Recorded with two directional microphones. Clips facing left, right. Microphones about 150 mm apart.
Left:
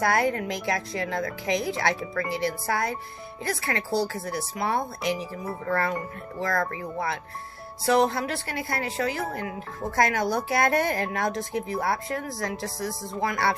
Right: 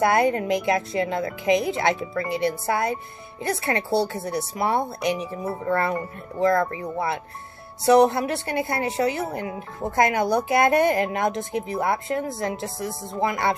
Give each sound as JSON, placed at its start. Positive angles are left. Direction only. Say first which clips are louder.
{"t": 0.0, "sound": "a woman's voice", "louder": "right 4 dB", "side_deg": -20}